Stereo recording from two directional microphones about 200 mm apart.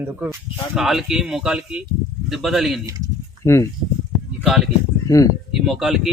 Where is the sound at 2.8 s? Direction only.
20° right (ahead or behind).